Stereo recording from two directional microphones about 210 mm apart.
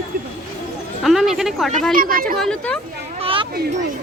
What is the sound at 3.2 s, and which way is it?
Children playing, 25° right (ahead or behind).